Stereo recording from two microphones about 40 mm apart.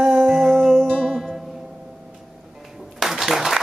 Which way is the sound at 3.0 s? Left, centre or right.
Centre.